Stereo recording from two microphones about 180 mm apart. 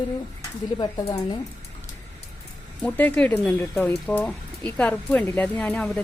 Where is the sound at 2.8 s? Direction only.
10° left (ahead or behind).